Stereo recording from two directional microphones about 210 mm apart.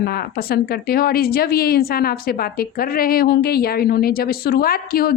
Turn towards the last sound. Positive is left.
turn(degrees=45)  # may be behind; listen again after turning